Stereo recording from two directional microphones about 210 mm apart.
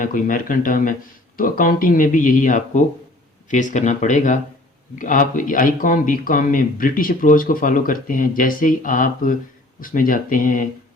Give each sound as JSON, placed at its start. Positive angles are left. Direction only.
{"t": 0.0, "sound": "speech", "side_deg": 40}